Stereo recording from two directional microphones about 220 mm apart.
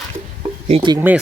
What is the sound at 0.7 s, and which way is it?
Speech, 20° right (ahead or behind).